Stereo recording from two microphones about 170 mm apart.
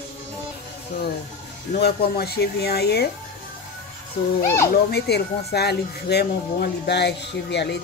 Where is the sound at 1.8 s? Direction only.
70° left (ahead or behind).